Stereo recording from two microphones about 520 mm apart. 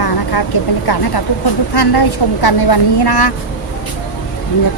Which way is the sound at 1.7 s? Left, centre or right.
Left.